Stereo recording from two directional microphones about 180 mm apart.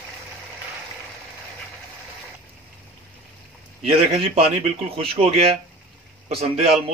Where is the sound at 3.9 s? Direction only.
35° right (ahead or behind).